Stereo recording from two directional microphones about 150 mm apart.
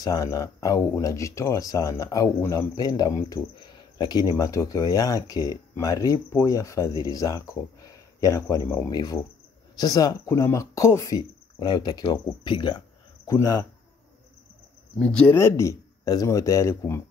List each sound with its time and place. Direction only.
0.0 s speech: 25° left (ahead or behind)
15.0 s speech: 5° left (ahead or behind)
15.3 s speech: 15° left (ahead or behind)